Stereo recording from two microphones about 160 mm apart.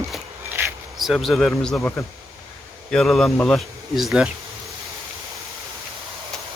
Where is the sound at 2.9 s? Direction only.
Centre (ahead or behind).